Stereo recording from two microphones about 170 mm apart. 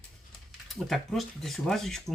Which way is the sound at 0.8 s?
Centre (ahead or behind).